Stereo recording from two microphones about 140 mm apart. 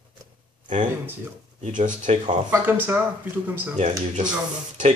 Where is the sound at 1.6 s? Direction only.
65° right (ahead or behind).